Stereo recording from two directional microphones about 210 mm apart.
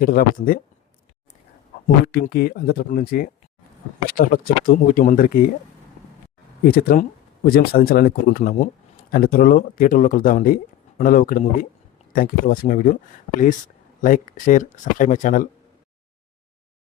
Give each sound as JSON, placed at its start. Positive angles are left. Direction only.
{"t": 0.0, "sound": "speech", "side_deg": 45}
{"t": 2.1, "sound": "speech", "side_deg": 45}
{"t": 6.7, "sound": "speech", "side_deg": 45}
{"t": 14.0, "sound": "speech", "side_deg": 40}